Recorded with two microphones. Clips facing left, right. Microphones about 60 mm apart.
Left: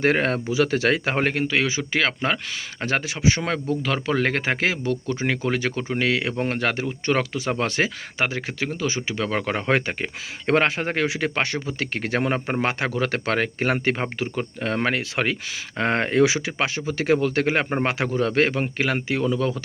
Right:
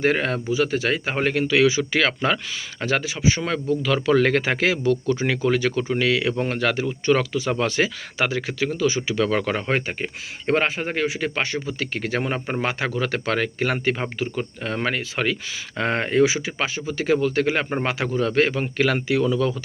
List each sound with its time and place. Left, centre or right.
0.0 s speech: left
0.5 s speech: left
1.2 s speech: left
2.8 s speech: left
3.9 s speech: left
9.6 s speech: left
13.7 s speech: left
16.5 s speech: left
18.9 s speech: left